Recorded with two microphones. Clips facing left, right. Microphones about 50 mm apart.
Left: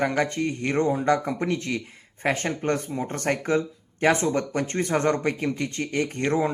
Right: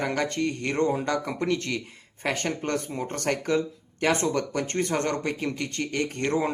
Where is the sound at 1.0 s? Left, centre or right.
Left.